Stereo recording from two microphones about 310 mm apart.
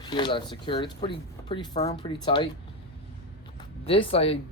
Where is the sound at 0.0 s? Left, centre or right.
Centre.